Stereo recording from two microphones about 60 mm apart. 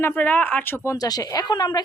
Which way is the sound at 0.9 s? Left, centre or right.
Left.